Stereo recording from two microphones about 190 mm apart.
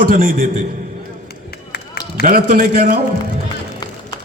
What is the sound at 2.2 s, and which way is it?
Speech, 50° right (ahead or behind).